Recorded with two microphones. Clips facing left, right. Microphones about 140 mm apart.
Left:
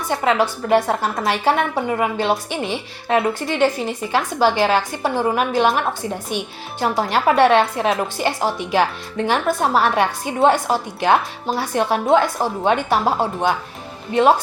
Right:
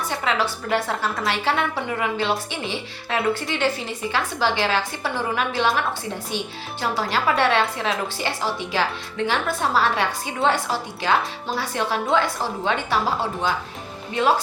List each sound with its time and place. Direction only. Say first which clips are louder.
0.1 s speech: left 8 dB; 50° left (ahead or behind)